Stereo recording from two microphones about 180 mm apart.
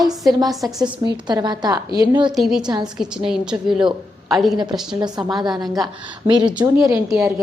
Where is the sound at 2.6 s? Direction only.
25° right (ahead or behind).